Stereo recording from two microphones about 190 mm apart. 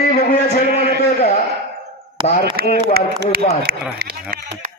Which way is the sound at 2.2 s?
25° right (ahead or behind).